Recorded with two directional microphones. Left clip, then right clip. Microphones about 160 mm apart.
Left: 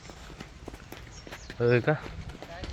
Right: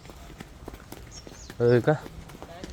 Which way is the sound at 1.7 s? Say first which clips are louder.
Right 3 dB; 45° right (ahead or behind).